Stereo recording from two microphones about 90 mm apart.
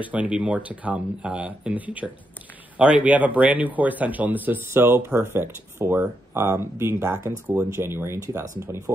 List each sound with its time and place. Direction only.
0.0 s speech: 15° right (ahead or behind); by 8.9 s 35° right (ahead or behind)